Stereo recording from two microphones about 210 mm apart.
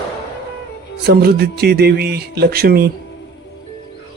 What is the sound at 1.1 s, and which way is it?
Speech, 50° right (ahead or behind).